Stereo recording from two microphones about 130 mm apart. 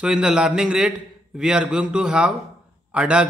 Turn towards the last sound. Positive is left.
turn(degrees=-10)  # may be behind; listen again after turning